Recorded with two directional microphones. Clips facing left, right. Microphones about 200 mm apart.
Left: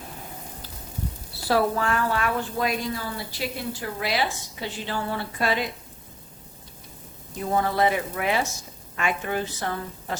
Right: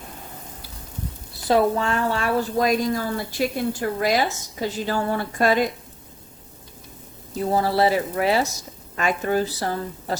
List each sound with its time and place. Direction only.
1.5 s a woman's voice: 25° right (ahead or behind); by 5.6 s 45° right (ahead or behind)
7.5 s speech: 35° right (ahead or behind)